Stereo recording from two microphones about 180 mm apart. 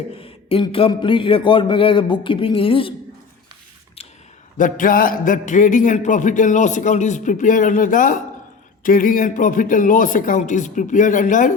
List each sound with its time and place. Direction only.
0.2 s a man's voice: 30° left (ahead or behind)
4.5 s a man's voice: 50° left (ahead or behind)